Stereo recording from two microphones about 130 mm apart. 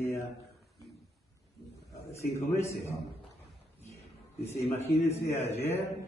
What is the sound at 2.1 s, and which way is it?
Speech, 20° left (ahead or behind).